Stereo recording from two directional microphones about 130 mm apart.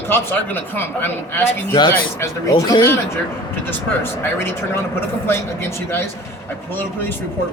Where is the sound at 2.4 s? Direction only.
30° left (ahead or behind).